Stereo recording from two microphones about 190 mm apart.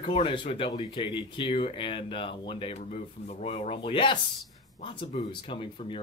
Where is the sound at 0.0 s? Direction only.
30° left (ahead or behind).